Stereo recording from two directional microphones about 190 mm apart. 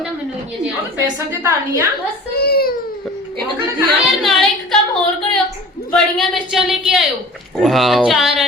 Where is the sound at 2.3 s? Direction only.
55° left (ahead or behind).